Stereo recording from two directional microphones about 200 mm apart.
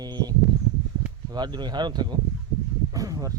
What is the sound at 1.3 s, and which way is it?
Speech, 20° right (ahead or behind).